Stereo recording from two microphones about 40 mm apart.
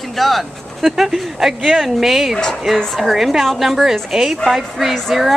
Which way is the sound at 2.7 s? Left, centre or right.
Centre.